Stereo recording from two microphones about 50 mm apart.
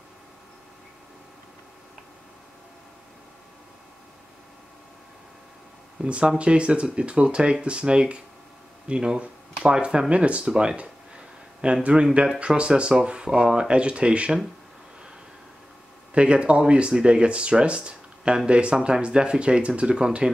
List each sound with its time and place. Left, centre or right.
6.0 s speech: right
16.1 s speech: right